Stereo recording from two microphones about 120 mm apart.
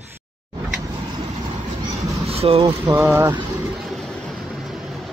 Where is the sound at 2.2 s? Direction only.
55° right (ahead or behind).